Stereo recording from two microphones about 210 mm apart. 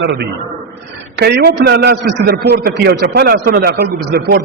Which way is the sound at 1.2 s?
50° right (ahead or behind).